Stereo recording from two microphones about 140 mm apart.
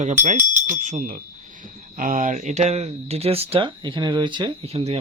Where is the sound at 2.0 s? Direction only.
70° right (ahead or behind); by 4.5 s 35° right (ahead or behind).